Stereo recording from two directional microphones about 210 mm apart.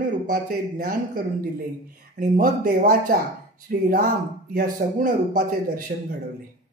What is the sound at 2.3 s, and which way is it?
Speech, 40° right (ahead or behind).